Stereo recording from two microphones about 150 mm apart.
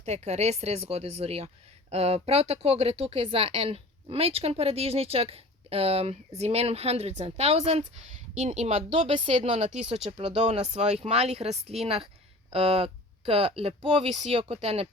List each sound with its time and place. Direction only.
0.0 s speech: 45° right (ahead or behind)